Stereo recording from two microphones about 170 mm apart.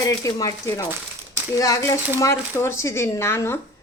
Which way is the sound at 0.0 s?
20° left (ahead or behind).